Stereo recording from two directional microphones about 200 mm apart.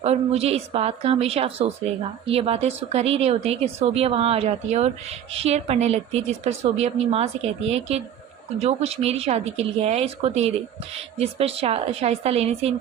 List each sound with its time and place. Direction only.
0.0 s a woman's voice: 30° right (ahead or behind)